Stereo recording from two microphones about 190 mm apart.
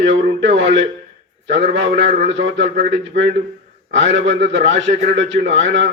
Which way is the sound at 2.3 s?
70° right (ahead or behind).